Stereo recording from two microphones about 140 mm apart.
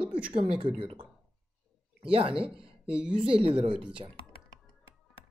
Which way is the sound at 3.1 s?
40° right (ahead or behind).